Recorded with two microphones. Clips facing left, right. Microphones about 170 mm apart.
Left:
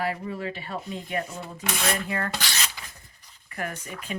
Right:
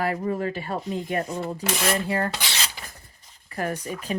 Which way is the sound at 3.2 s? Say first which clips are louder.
Right 4 dB; 35° right (ahead or behind).